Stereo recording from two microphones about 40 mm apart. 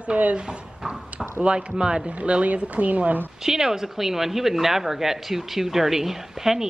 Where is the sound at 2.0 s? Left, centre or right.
Right.